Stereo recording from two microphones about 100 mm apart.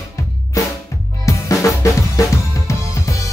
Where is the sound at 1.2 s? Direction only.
35° left (ahead or behind).